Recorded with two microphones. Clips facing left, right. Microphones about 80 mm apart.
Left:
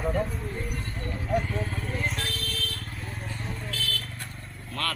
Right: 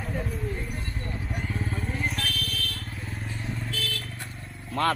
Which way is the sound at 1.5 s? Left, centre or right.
Right.